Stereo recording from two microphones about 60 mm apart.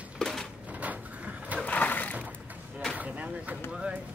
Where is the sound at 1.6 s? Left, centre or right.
Left.